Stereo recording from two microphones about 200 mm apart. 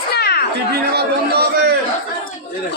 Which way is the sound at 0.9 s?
55° right (ahead or behind).